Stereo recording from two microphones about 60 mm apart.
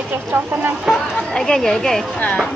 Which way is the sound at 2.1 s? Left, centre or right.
Left.